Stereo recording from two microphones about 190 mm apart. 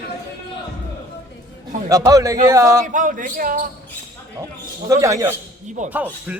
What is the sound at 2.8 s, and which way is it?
Speech, 45° right (ahead or behind).